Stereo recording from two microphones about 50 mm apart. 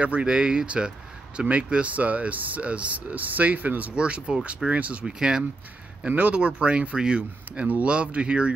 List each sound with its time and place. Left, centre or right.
0.0 s speech: right
3.9 s speech: centre
5.0 s speech: centre
6.0 s speech: right